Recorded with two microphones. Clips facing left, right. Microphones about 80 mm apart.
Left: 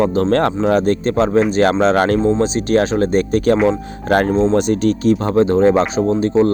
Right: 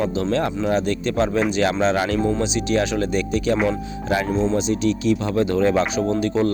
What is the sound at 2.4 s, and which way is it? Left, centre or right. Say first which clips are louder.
Speech: left 5 dB; left.